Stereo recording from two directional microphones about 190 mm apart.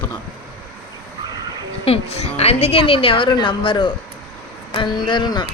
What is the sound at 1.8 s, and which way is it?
A woman's voice, 30° left (ahead or behind).